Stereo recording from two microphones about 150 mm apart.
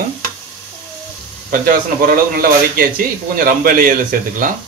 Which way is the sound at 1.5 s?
70° right (ahead or behind).